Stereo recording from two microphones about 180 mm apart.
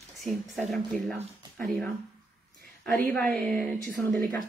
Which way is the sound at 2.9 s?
10° left (ahead or behind).